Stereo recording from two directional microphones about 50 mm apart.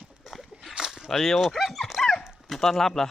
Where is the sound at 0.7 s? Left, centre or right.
Centre.